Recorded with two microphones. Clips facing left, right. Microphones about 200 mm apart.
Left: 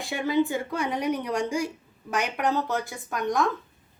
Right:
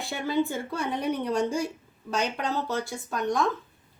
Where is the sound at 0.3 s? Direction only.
15° left (ahead or behind).